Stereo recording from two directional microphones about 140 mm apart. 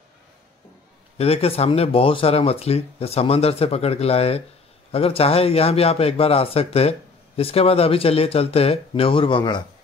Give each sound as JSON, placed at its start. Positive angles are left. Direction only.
{"t": 1.1, "sound": "speech", "side_deg": 45}